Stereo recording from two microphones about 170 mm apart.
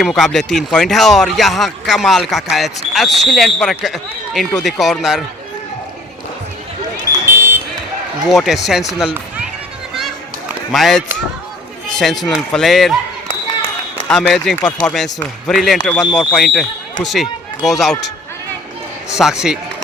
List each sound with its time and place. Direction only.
0.0 s speech: centre (ahead or behind)
7.3 s a sound: 15° right (ahead or behind)
8.3 s speech: centre (ahead or behind)
10.7 s speech: centre (ahead or behind)
14.1 s speech: centre (ahead or behind)
14.5 s speech: 20° left (ahead or behind)
14.8 s speech: 5° left (ahead or behind)
19.1 s speech: 5° right (ahead or behind)